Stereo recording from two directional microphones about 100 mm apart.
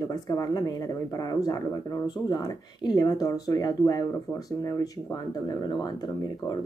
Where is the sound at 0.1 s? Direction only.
40° left (ahead or behind).